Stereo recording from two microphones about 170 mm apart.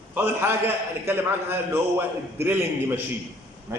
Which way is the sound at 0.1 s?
10° right (ahead or behind).